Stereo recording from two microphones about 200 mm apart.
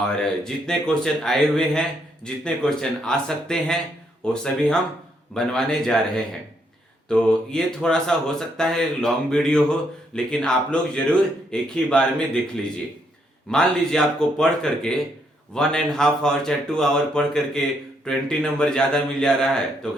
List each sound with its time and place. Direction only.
0.0 s speech: 5° left (ahead or behind)
13.5 s speech: centre (ahead or behind)